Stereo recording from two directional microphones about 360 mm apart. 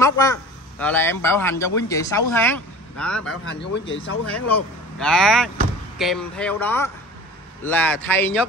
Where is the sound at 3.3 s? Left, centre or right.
Left.